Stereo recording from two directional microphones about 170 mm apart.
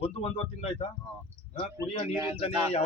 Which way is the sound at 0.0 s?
35° left (ahead or behind).